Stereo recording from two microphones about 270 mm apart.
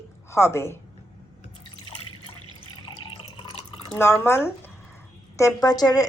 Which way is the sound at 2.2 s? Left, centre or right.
Left.